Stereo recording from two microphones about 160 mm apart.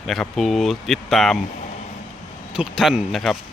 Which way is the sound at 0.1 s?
Centre (ahead or behind).